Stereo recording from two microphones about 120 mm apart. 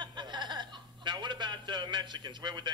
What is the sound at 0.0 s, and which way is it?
Chuckle, 40° right (ahead or behind).